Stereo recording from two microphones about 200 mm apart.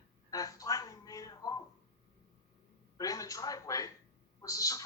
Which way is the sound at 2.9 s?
15° left (ahead or behind).